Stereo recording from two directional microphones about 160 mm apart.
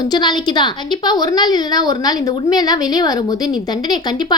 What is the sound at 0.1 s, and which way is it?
A woman's voice, 25° left (ahead or behind).